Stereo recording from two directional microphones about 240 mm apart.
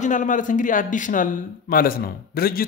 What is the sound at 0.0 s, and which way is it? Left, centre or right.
Speech, left.